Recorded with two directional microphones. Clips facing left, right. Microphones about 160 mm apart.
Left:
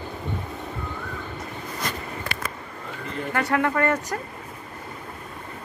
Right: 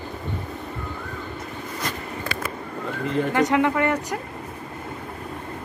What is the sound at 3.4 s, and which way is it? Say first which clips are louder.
Speech: right 1 dB; 15° right (ahead or behind).